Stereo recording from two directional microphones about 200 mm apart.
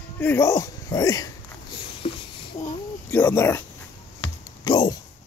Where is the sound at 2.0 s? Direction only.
30° left (ahead or behind).